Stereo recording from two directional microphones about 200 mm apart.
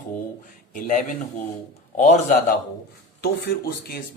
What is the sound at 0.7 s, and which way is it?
Speech, 40° left (ahead or behind).